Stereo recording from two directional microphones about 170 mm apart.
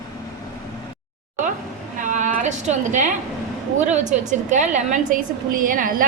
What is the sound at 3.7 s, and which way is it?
A woman's voice, 45° right (ahead or behind).